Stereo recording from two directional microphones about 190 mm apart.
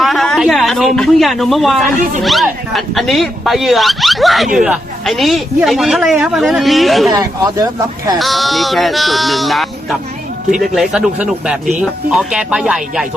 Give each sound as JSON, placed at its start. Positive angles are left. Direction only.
{"t": 0.0, "sound": "a sound", "side_deg": 0}
{"t": 2.2, "sound": "a woman's voice", "side_deg": 0}
{"t": 7.1, "sound": "speech", "side_deg": -20}
{"t": 8.2, "sound": "a woman's voice", "side_deg": 0}